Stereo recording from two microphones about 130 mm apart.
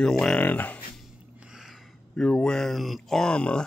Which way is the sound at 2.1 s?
5° left (ahead or behind).